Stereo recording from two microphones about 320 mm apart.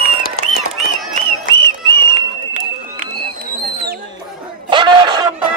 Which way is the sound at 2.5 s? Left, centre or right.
Right.